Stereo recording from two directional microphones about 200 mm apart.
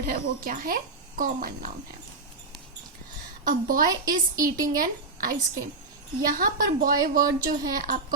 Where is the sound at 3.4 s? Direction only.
45° right (ahead or behind).